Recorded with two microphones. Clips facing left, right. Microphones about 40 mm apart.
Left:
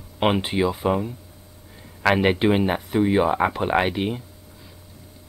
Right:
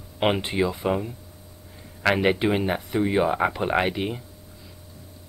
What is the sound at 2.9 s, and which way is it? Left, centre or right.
Speech, centre.